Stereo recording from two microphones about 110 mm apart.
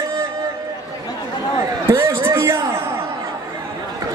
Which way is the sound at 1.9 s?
25° right (ahead or behind).